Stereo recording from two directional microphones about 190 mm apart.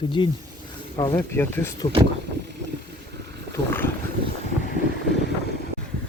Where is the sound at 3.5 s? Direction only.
10° left (ahead or behind).